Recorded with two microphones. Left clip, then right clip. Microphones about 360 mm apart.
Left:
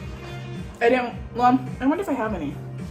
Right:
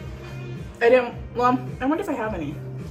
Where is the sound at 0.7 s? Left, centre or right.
Centre.